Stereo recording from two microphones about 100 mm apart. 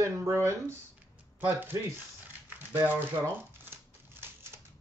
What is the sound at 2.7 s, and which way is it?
Typewriter, 20° right (ahead or behind).